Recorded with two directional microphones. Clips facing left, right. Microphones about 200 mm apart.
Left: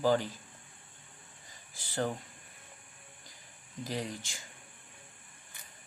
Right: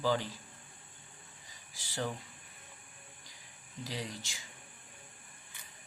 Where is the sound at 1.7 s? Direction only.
50° left (ahead or behind).